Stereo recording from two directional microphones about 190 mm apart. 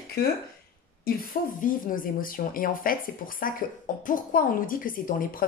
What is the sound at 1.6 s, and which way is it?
Speech, 45° left (ahead or behind).